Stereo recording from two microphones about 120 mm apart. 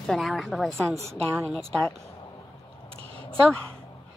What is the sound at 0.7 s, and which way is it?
Speech, 25° right (ahead or behind).